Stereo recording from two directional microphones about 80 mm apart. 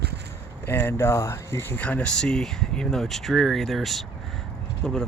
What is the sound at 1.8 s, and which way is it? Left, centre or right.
Speech, centre.